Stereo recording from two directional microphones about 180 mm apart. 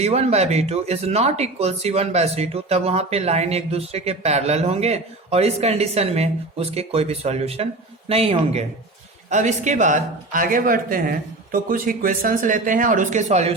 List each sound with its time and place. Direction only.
0.0 s speech: 35° right (ahead or behind)